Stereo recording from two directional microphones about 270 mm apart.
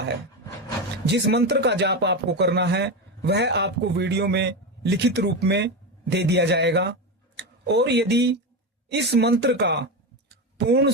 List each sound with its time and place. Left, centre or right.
1.0 s speech: right